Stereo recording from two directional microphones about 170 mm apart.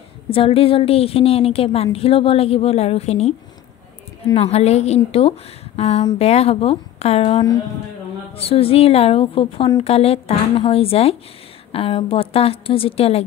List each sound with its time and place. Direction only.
0.3 s a woman's voice: 35° left (ahead or behind)
4.4 s a woman's voice: 40° left (ahead or behind)